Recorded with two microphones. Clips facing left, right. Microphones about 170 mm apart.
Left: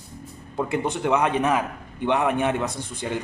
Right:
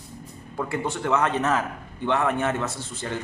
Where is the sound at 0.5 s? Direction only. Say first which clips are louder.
Left 3 dB; 20° left (ahead or behind).